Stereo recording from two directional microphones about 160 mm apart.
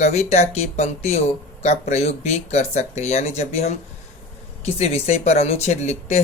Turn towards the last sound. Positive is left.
turn(degrees=45)  # may be behind; listen again after turning